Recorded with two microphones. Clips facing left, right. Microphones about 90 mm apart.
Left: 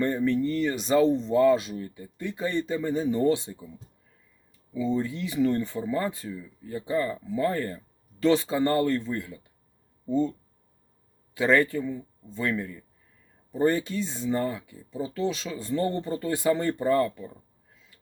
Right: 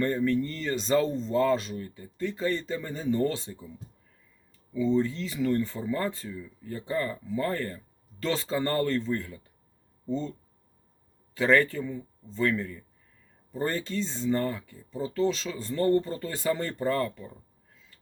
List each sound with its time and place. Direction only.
0.0 s speech: 15° left (ahead or behind)
4.7 s speech: 10° left (ahead or behind)
11.3 s speech: 15° left (ahead or behind)